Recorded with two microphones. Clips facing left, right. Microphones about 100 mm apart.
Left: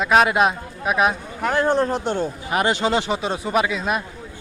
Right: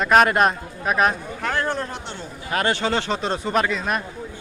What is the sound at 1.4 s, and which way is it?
Speech, 20° left (ahead or behind).